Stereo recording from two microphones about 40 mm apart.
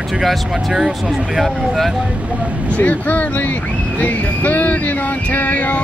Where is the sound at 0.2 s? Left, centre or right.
Centre.